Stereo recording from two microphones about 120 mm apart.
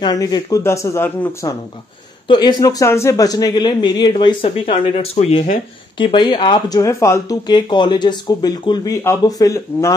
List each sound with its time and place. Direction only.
0.0 s speech: 35° left (ahead or behind); by 1.5 s 20° left (ahead or behind)
2.2 s a man's voice: 35° left (ahead or behind)
6.8 s a man's voice: 25° left (ahead or behind)